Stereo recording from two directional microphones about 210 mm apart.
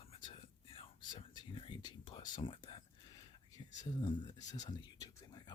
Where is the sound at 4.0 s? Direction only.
20° left (ahead or behind).